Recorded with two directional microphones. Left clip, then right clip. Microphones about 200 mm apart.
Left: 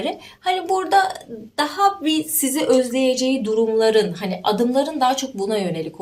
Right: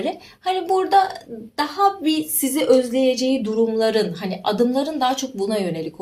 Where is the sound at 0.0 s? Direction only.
20° left (ahead or behind).